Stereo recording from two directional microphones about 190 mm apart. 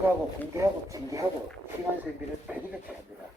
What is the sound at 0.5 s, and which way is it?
Speech, 15° right (ahead or behind).